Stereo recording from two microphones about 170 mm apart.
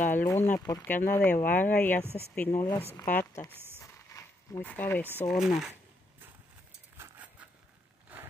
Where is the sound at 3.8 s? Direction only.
20° left (ahead or behind).